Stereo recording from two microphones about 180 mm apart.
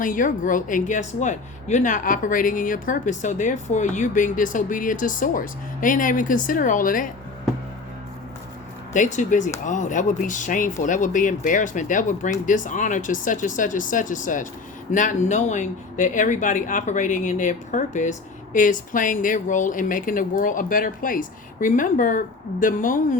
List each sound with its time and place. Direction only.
0.0 s speech: 45° left (ahead or behind)
8.9 s speech: 45° left (ahead or behind)